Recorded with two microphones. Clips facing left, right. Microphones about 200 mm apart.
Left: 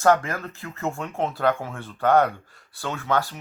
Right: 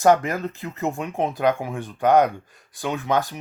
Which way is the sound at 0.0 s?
15° right (ahead or behind).